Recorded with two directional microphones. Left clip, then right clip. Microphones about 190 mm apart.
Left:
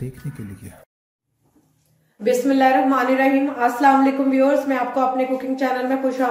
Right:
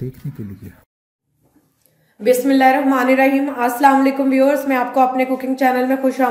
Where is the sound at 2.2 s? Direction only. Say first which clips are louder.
Right 3 dB; 40° right (ahead or behind).